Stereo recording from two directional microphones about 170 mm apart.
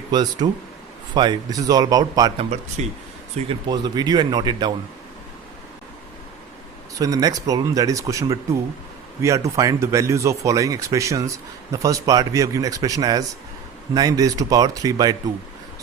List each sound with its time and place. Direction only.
0.1 s speech: 25° right (ahead or behind)
2.4 s speech: 40° right (ahead or behind)
3.5 s speech: 25° right (ahead or behind)
7.0 s speech: 20° right (ahead or behind)